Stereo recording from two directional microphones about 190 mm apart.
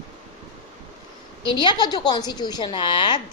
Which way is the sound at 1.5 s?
25° left (ahead or behind).